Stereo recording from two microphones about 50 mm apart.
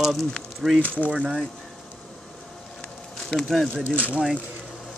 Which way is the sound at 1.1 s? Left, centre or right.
Centre.